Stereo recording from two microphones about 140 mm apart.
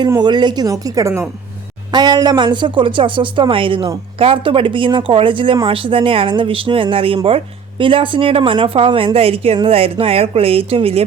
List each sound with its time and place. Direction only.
0.1 s a woman's voice: 30° right (ahead or behind)